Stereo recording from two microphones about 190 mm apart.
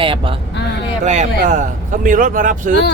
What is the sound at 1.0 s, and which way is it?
A man's voice, 40° right (ahead or behind).